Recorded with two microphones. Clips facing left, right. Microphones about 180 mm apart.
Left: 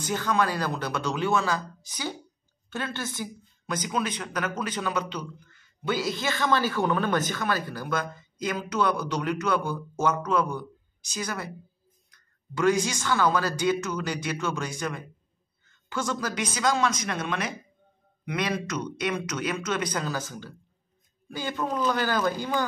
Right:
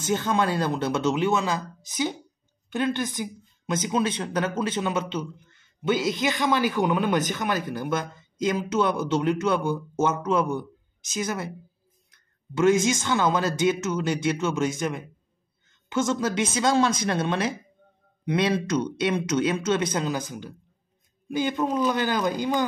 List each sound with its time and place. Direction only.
0.0 s speech: 25° right (ahead or behind)